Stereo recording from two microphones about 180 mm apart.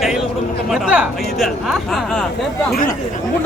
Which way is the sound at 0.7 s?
5° right (ahead or behind).